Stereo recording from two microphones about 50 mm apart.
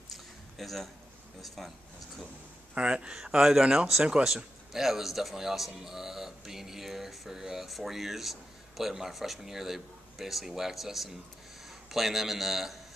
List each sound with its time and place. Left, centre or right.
0.1 s a sound: centre
1.4 s speech: centre
2.7 s speech: right
3.3 s speech: centre